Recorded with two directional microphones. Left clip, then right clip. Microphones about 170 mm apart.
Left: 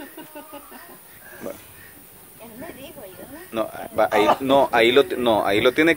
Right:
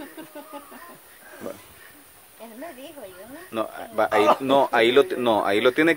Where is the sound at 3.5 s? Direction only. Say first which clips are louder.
Left 2 dB; 10° left (ahead or behind).